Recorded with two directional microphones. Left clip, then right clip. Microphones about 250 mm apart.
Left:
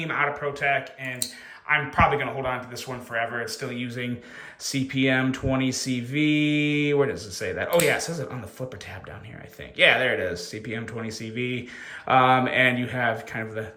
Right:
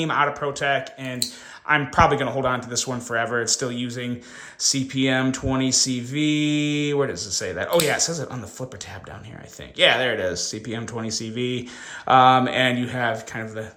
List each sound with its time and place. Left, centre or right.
0.0 s speech: centre
9.7 s speech: centre